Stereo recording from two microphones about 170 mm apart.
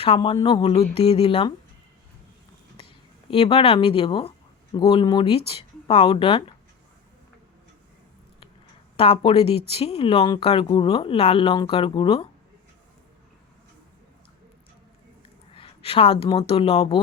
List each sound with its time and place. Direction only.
0.0 s speech: 35° left (ahead or behind)
3.2 s speech: 30° left (ahead or behind)
9.0 s speech: 35° left (ahead or behind)
15.5 s speech: 35° left (ahead or behind)